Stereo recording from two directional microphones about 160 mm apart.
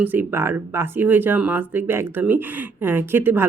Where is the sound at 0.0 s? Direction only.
10° right (ahead or behind).